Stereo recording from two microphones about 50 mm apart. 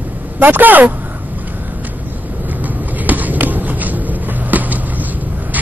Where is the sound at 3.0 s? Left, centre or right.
Right.